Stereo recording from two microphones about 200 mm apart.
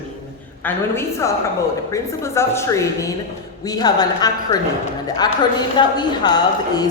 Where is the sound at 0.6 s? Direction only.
10° left (ahead or behind).